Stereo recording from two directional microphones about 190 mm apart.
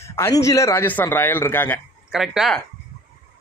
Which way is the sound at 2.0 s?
5° right (ahead or behind).